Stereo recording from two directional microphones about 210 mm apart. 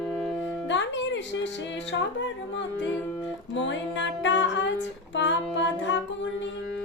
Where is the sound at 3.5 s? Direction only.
60° left (ahead or behind).